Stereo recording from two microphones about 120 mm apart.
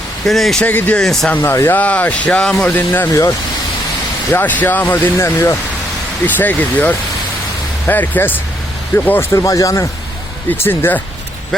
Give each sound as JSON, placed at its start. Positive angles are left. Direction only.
{"t": 0.3, "sound": "speech", "side_deg": 0}
{"t": 0.7, "sound": "speech", "side_deg": 15}
{"t": 1.0, "sound": "speech", "side_deg": 0}
{"t": 1.4, "sound": "speech", "side_deg": 20}
{"t": 2.7, "sound": "speech", "side_deg": 15}
{"t": 3.1, "sound": "speech", "side_deg": 30}
{"t": 4.3, "sound": "speech", "side_deg": 15}
{"t": 10.6, "sound": "speech", "side_deg": 15}